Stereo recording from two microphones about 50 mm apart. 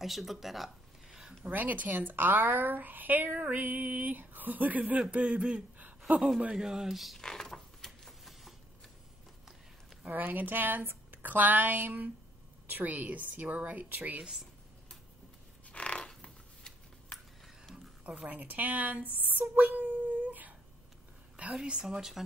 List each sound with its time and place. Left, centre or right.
0.0 s speech: centre
1.1 s a sound: centre
1.5 s a woman's voice: right
6.4 s speech: centre
7.2 s a sound: centre
10.0 s a woman's voice: right
14.2 s speech: centre
15.7 s a sound: left
18.3 s a woman's voice: right
19.5 s humming: right
21.5 s speech: centre